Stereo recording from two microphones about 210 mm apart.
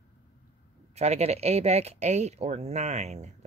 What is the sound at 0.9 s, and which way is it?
Speech, 30° right (ahead or behind).